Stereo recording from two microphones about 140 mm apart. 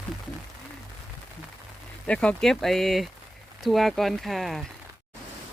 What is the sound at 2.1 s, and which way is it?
Speech, 5° left (ahead or behind).